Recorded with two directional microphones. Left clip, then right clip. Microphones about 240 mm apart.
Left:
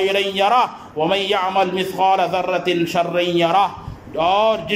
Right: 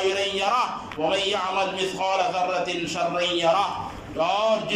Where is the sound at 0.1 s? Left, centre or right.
Left.